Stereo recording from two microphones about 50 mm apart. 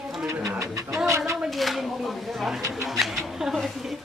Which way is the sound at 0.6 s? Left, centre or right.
Right.